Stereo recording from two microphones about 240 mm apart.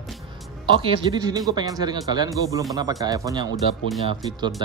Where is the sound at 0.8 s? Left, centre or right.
Centre.